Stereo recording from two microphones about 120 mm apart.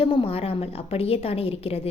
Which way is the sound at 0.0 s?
50° left (ahead or behind).